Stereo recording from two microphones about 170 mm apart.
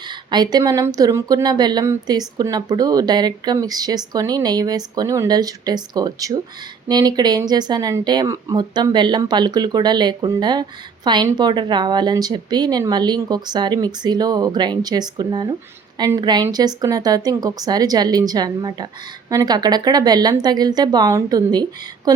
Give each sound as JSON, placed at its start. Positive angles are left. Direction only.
{"t": 0.1, "sound": "speech", "side_deg": -25}